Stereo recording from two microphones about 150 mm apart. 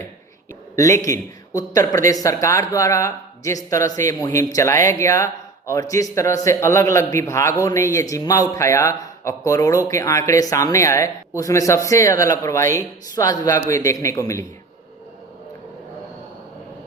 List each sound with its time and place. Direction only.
0.8 s speech: 20° left (ahead or behind)